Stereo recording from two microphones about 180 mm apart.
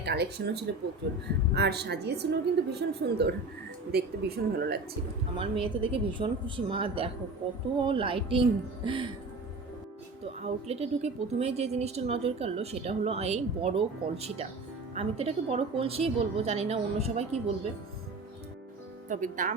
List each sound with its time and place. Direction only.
0.0 s a woman's voice: 70° right (ahead or behind)
5.4 s a woman's voice: 30° right (ahead or behind)
10.4 s a woman's voice: 35° right (ahead or behind)
19.0 s speech: 45° right (ahead or behind)